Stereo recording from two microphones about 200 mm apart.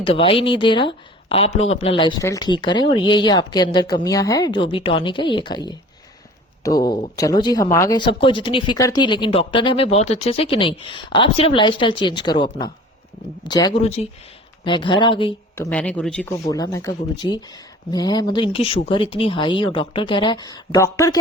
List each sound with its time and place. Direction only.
0.0 s speech: 30° left (ahead or behind)
13.8 s speech: 30° left (ahead or behind)
15.5 s speech: 10° left (ahead or behind)
16.5 s speech: 15° left (ahead or behind)